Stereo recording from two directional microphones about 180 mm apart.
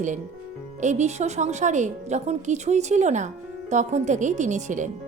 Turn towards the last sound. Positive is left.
turn(degrees=-40)  # may be behind; listen again after turning